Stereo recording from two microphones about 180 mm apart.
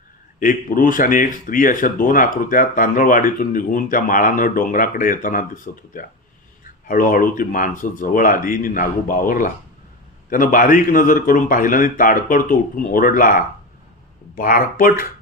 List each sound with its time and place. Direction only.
0.3 s speech: 50° left (ahead or behind)